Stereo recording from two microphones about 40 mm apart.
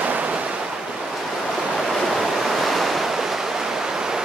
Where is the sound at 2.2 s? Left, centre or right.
Centre.